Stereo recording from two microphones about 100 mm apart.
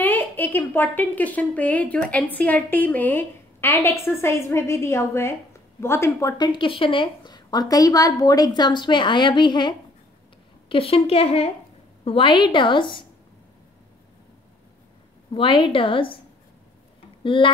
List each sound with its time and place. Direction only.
0.0 s a woman's voice: 20° left (ahead or behind)
6.3 s a woman's voice: 50° left (ahead or behind)
10.7 s a woman's voice: 70° left (ahead or behind)
12.0 s a woman's voice: 65° left (ahead or behind)
15.3 s a woman's voice: 60° left (ahead or behind)
17.2 s speech: 55° left (ahead or behind)